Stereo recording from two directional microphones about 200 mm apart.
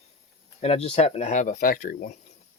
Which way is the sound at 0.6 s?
30° left (ahead or behind).